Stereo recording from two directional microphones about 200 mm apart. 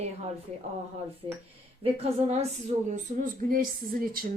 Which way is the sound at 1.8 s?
30° right (ahead or behind).